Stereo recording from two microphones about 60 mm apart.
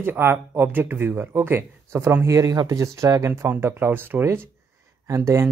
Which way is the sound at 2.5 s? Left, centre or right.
Right.